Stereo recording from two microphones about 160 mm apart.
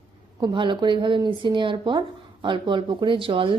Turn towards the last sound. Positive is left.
turn(degrees=-35)  # may be behind; listen again after turning